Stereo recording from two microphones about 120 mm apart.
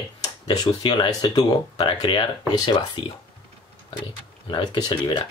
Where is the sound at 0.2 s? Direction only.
35° left (ahead or behind).